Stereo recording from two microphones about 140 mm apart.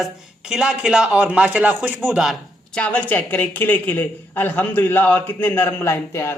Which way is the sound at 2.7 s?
10° left (ahead or behind).